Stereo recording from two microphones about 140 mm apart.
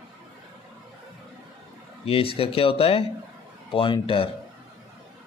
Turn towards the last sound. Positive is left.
turn(degrees=40)  # may be behind; listen again after turning